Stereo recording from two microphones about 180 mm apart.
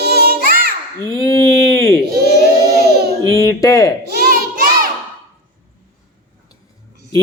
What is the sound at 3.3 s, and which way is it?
Speech, 20° left (ahead or behind).